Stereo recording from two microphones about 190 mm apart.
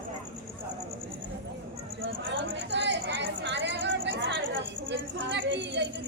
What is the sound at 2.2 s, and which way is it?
Speech, 70° right (ahead or behind).